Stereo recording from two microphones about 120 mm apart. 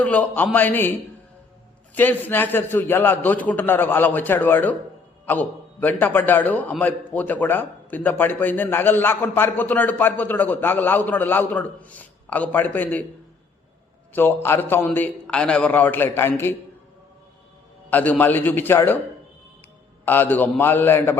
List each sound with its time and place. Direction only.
0.0 s a man's voice: 10° left (ahead or behind)
2.0 s a man's voice: 15° left (ahead or behind)
14.1 s a man's voice: 20° left (ahead or behind)
17.9 s a man's voice: 15° left (ahead or behind)
20.1 s a man's voice: 15° left (ahead or behind)